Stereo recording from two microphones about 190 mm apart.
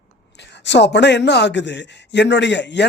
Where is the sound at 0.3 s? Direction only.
65° left (ahead or behind).